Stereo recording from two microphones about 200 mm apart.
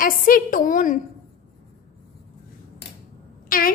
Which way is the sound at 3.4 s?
45° left (ahead or behind).